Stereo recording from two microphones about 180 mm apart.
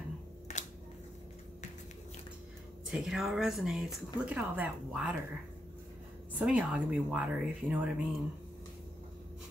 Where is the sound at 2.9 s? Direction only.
Centre (ahead or behind).